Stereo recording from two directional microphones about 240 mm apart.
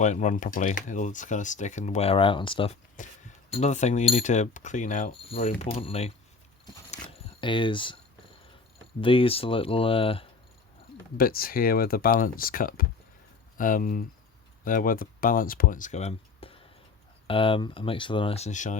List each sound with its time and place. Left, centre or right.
0.0 s speech: left
2.9 s speech: left
6.9 s a sound: left
9.0 s speech: left
11.2 s speech: left